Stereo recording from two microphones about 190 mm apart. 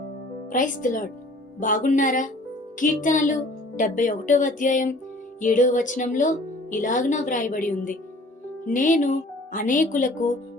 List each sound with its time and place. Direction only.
0.5 s speech: 45° left (ahead or behind)